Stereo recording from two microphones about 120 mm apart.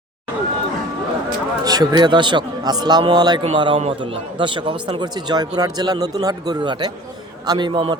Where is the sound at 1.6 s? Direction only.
35° right (ahead or behind).